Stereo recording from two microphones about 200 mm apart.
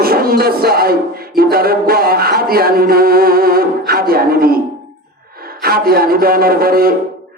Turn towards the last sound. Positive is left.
turn(degrees=-50)  # may be behind; listen again after turning